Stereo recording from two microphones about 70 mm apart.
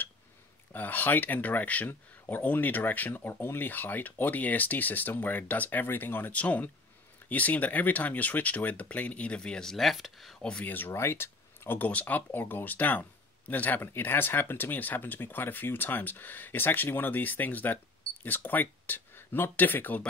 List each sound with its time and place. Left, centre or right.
0.7 s speech: left; by 10.3 s centre
10.4 s speech: centre
10.7 s speech: left
11.9 s speech: left